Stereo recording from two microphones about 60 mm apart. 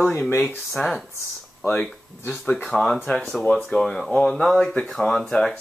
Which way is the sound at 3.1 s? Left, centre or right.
Centre.